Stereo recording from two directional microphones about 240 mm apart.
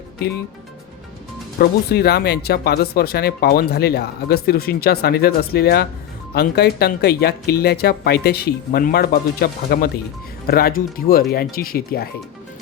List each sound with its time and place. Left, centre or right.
1.5 s speech: left